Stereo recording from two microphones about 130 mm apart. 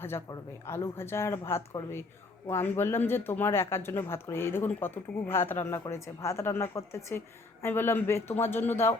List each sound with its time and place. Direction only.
0.0 s speech: 20° left (ahead or behind)